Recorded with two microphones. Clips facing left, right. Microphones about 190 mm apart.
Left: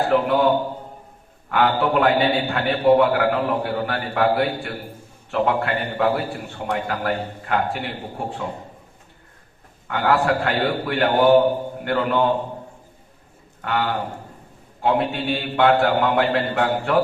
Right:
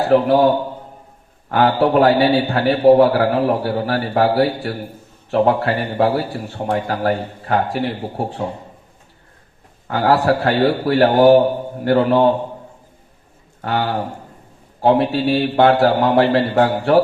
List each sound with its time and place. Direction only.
0.1 s a man's voice: 35° right (ahead or behind)
9.8 s a man's voice: 35° right (ahead or behind)
13.6 s a man's voice: 35° right (ahead or behind)